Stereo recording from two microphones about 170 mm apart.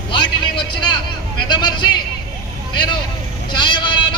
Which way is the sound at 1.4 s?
25° left (ahead or behind).